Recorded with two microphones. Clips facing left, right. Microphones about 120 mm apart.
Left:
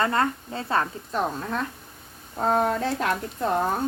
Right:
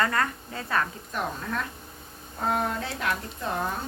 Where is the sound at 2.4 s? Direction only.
40° left (ahead or behind).